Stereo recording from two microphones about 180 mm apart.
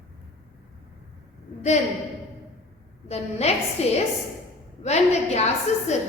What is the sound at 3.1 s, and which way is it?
Speech, 35° left (ahead or behind).